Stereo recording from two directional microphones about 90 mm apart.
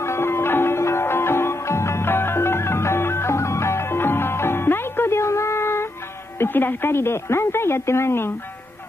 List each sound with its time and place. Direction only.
0.0 s music: 30° left (ahead or behind)
6.4 s a woman's voice: 25° left (ahead or behind)